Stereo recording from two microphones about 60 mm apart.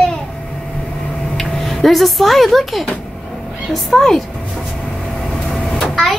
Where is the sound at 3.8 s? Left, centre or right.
Centre.